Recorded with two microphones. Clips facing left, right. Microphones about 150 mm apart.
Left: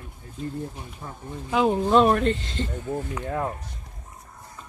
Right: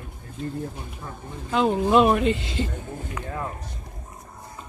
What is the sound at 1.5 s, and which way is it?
Speech, 5° left (ahead or behind).